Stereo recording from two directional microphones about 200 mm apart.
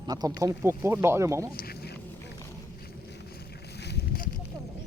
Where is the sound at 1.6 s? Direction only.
50° left (ahead or behind).